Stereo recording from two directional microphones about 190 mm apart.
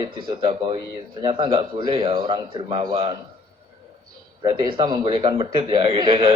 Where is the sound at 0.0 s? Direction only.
25° right (ahead or behind).